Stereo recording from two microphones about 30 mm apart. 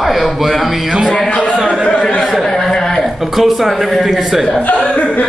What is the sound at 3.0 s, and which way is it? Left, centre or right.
A man's voice, centre.